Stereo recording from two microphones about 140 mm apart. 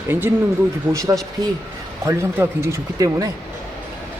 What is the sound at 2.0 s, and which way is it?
Speech, 20° right (ahead or behind).